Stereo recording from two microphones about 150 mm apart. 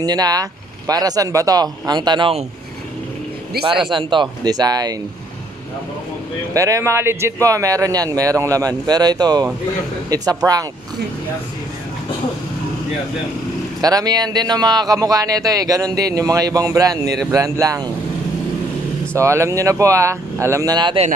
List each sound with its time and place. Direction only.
0.0 s speech: 25° right (ahead or behind)
3.8 s speech: 30° right (ahead or behind)
6.5 s speech: 20° right (ahead or behind)
13.7 s speech: 25° right (ahead or behind)
19.1 s speech: 20° right (ahead or behind)